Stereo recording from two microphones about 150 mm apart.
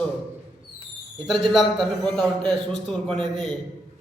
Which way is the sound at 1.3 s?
Centre (ahead or behind).